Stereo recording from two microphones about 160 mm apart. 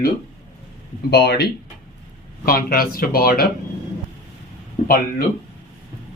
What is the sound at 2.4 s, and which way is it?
Speech, 65° left (ahead or behind).